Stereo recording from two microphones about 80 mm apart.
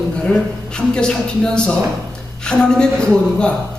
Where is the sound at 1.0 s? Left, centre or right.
Centre.